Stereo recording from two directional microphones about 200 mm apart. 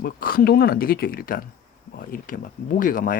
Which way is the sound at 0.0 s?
45° left (ahead or behind).